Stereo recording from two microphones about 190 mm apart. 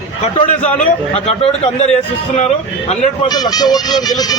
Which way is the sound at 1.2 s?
35° left (ahead or behind).